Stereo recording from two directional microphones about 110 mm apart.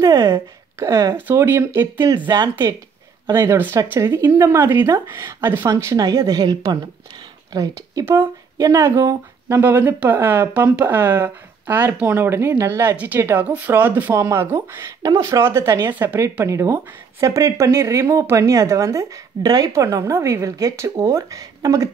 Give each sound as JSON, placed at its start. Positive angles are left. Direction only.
{"t": 0.0, "sound": "a sound", "side_deg": -40}
{"t": 0.3, "sound": "speech", "side_deg": -30}
{"t": 1.1, "sound": "speech", "side_deg": -20}
{"t": 2.1, "sound": "speech", "side_deg": -40}
{"t": 3.3, "sound": "speech", "side_deg": -20}
{"t": 15.9, "sound": "speech", "side_deg": -15}
{"t": 16.4, "sound": "speech", "side_deg": -25}